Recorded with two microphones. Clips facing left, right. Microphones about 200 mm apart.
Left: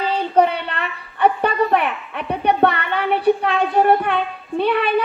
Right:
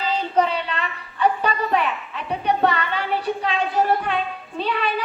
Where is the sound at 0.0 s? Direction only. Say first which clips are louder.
Left 4 dB; 60° left (ahead or behind).